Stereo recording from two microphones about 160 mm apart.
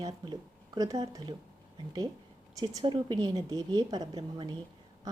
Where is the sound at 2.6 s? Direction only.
25° right (ahead or behind).